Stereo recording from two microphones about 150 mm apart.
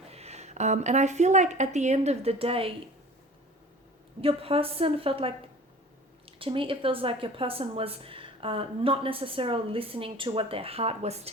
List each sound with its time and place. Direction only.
0.1 s a woman's voice: 45° right (ahead or behind)
4.2 s speech: 40° right (ahead or behind)